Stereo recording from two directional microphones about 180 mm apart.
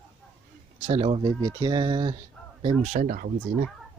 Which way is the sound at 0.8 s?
30° right (ahead or behind).